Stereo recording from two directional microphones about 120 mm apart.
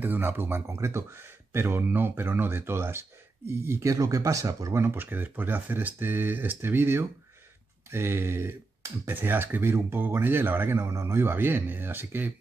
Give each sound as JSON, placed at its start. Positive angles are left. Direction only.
{"t": 0.0, "sound": "speech", "side_deg": -15}